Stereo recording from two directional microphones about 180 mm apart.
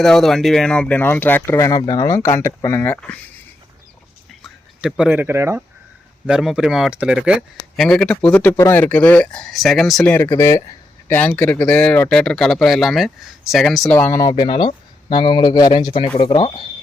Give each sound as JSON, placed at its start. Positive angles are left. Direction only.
{"t": 0.0, "sound": "speech", "side_deg": 0}
{"t": 4.3, "sound": "a sound", "side_deg": 0}
{"t": 6.2, "sound": "speech", "side_deg": -5}